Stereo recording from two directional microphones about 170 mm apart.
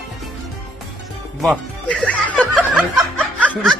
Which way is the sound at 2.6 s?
5° right (ahead or behind).